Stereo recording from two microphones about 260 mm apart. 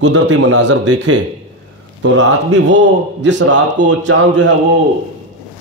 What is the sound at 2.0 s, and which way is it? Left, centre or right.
A man's voice, right.